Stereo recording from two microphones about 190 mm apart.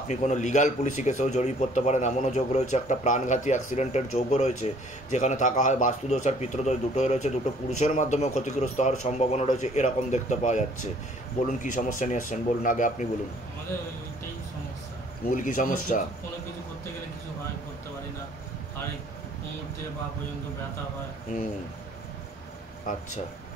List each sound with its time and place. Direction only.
0.1 s a man's voice: 40° left (ahead or behind)
15.2 s speech: 45° left (ahead or behind)
21.3 s speech: 45° left (ahead or behind)